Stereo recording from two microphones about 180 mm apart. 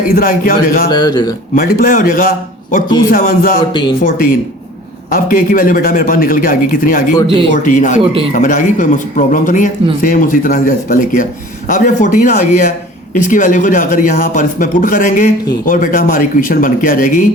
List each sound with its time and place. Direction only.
0.1 s speech: 55° left (ahead or behind)
0.9 s a man's voice: 25° left (ahead or behind)
1.5 s speech: 50° left (ahead or behind)
3.7 s a man's voice: 25° left (ahead or behind)
5.1 s speech: 50° left (ahead or behind)
8.0 s a man's voice: 30° right (ahead or behind)
8.3 s speech: 45° left (ahead or behind)